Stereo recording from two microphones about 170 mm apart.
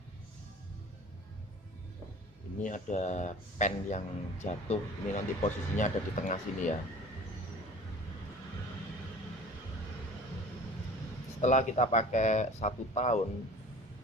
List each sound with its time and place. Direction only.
2.6 s speech: 45° left (ahead or behind)
11.3 s speech: 45° left (ahead or behind)